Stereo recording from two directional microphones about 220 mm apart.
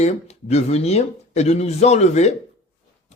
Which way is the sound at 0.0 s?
30° left (ahead or behind).